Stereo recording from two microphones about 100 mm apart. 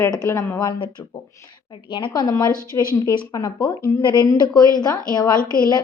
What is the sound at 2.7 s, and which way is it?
Speech, 40° left (ahead or behind).